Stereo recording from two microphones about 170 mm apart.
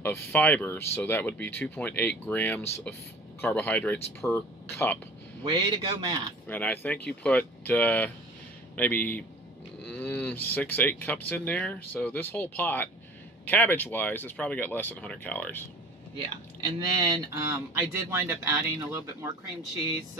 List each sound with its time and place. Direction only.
0.0 s speech: 10° left (ahead or behind)
5.4 s speech: 25° right (ahead or behind)
6.4 s speech: 10° left (ahead or behind)
16.2 s speech: 25° right (ahead or behind)